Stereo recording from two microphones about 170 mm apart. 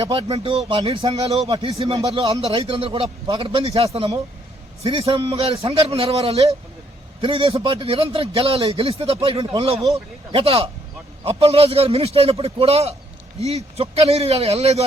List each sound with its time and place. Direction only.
0.0 s speech: 30° right (ahead or behind)